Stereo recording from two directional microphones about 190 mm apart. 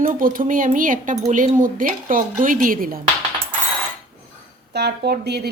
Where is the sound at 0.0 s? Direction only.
45° right (ahead or behind).